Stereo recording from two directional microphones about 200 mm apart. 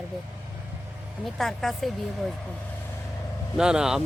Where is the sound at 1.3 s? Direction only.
Centre (ahead or behind).